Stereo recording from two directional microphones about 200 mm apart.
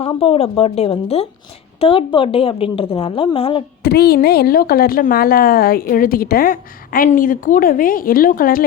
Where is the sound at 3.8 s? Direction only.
55° left (ahead or behind).